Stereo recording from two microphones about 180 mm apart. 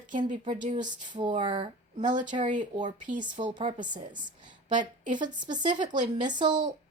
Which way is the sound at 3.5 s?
35° right (ahead or behind).